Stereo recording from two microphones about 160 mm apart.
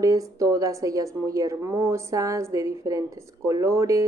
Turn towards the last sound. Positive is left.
turn(degrees=-20)  # may be behind; listen again after turning